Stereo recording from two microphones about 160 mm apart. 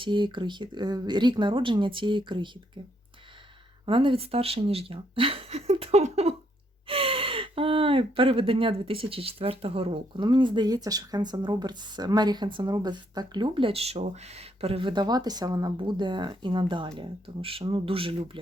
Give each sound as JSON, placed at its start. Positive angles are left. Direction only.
{"t": 0.0, "sound": "speech", "side_deg": -30}
{"t": 3.8, "sound": "speech", "side_deg": -35}